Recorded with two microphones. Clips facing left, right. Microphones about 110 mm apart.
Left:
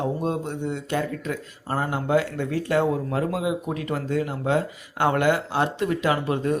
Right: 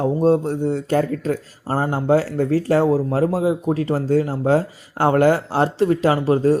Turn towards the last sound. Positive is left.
turn(degrees=-35)  # may be behind; listen again after turning